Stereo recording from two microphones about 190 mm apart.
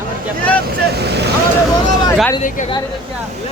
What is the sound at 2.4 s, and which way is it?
Speech, 45° left (ahead or behind).